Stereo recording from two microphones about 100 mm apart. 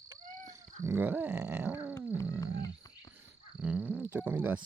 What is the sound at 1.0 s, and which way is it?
Grunt, 20° right (ahead or behind).